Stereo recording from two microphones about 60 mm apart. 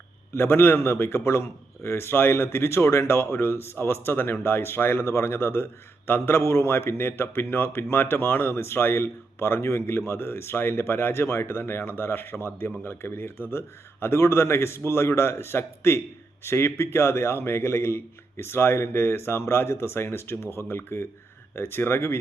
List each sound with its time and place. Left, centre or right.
0.3 s a man's voice: left